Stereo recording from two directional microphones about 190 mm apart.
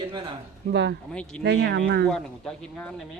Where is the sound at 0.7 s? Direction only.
65° right (ahead or behind).